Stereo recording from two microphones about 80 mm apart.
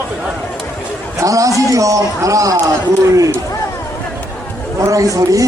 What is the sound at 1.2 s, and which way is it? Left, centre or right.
Speech, right.